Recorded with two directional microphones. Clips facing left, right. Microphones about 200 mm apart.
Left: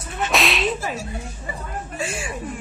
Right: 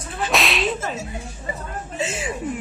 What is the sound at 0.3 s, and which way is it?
Whip, centre (ahead or behind).